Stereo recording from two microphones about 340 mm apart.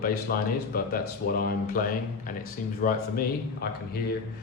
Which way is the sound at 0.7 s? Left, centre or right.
Left.